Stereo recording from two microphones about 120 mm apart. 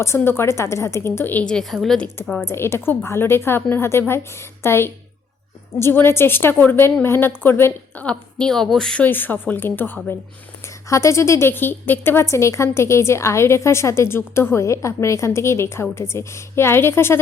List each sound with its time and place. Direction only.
0.0 s a woman's voice: 20° left (ahead or behind); by 2.5 s 5° left (ahead or behind)
2.5 s a woman's voice: 20° left (ahead or behind)